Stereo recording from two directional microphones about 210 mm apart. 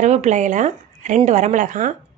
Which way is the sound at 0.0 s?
35° right (ahead or behind).